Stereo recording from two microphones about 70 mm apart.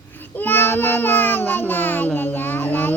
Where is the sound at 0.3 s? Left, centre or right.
Left.